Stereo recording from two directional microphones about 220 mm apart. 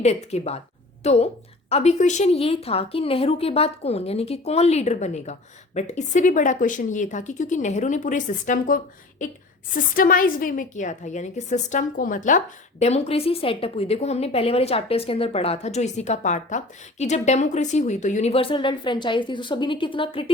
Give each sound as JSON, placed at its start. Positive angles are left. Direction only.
{"t": 0.0, "sound": "a woman's voice", "side_deg": 30}